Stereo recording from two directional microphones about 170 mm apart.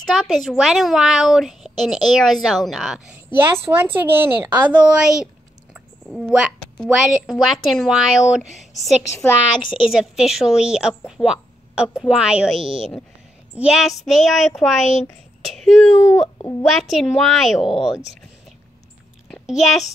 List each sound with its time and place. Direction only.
0.0 s a woman's voice: centre (ahead or behind)
3.3 s a woman's voice: 15° right (ahead or behind)
9.0 s speech: 15° left (ahead or behind)
9.8 s a woman's voice: 5° right (ahead or behind)
15.4 s a sound: centre (ahead or behind)
16.1 s speech: 15° left (ahead or behind)
16.6 s a woman's voice: centre (ahead or behind)
19.2 s a sound: centre (ahead or behind)